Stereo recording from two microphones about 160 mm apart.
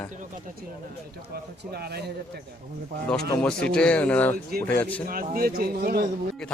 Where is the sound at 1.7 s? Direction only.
85° right.